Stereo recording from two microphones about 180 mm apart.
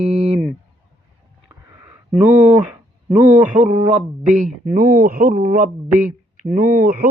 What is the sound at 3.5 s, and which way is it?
Speech, 45° right (ahead or behind).